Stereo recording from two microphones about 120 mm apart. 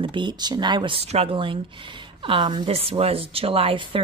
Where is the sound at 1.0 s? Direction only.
55° right (ahead or behind).